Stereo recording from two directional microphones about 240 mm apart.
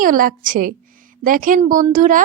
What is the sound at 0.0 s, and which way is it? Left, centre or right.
Speech, right.